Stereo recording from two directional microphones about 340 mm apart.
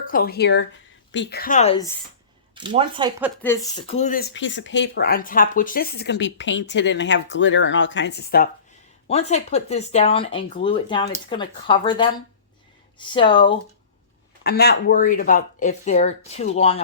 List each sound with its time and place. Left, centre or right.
0.0 s speech: left
2.6 s speech: centre
3.4 s speech: centre
14.4 s speech: left